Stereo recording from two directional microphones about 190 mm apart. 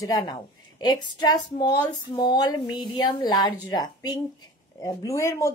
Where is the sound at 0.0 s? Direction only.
20° left (ahead or behind).